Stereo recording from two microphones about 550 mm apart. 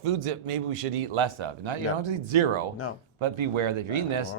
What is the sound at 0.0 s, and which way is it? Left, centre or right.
A man's voice, right.